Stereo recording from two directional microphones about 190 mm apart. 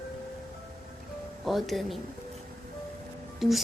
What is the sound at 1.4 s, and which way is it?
Speech, centre (ahead or behind).